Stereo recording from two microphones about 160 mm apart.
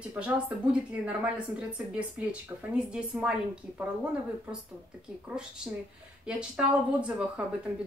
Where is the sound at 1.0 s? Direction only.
5° right (ahead or behind).